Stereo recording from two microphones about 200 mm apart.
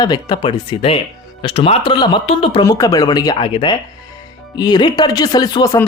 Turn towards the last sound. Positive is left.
turn(degrees=20)  # may be behind; listen again after turning